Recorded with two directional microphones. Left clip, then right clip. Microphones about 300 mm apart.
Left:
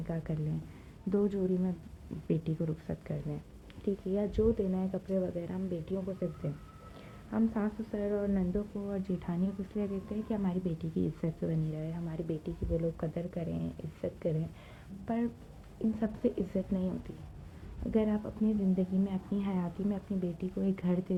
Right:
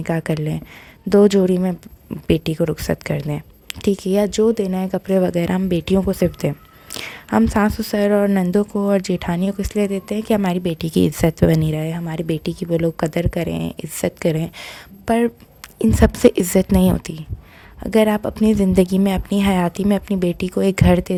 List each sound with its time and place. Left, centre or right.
0.0 s speech: right